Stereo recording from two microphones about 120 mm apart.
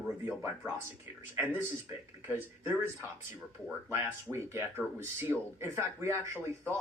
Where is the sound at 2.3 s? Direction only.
15° right (ahead or behind).